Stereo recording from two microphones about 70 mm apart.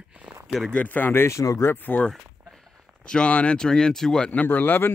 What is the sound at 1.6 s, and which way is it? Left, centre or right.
Speech, left.